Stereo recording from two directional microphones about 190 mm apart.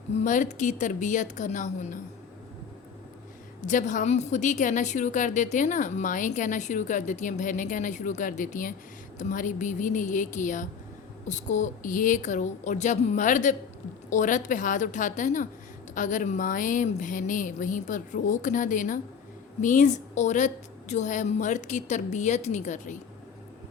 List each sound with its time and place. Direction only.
0.3 s a woman's voice: 40° left (ahead or behind)
3.6 s a woman's voice: 40° left (ahead or behind)